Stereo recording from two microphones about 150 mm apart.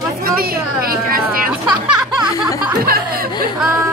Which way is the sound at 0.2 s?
85° right.